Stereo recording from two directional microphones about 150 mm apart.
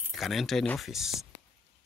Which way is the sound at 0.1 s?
Centre (ahead or behind).